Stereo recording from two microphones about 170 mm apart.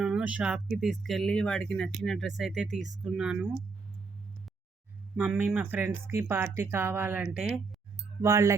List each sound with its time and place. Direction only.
0.0 s speech: 5° right (ahead or behind)
5.1 s speech: 10° right (ahead or behind)
8.2 s speech: 20° right (ahead or behind)